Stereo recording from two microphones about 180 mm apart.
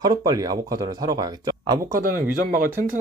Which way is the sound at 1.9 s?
55° right (ahead or behind).